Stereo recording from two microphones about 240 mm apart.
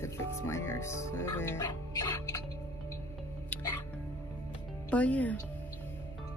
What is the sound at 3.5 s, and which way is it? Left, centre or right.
Music, centre.